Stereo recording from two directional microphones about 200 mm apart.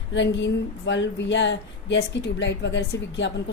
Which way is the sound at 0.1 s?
65° left (ahead or behind).